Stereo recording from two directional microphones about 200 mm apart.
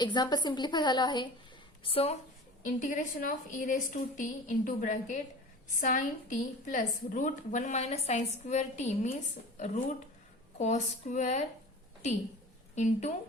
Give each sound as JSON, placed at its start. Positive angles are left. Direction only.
{"t": 0.0, "sound": "a woman's voice", "side_deg": 20}
{"t": 2.6, "sound": "a woman's voice", "side_deg": 40}
{"t": 12.7, "sound": "a woman's voice", "side_deg": 35}